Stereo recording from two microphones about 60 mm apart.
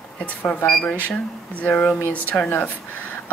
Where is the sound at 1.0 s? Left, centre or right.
Left.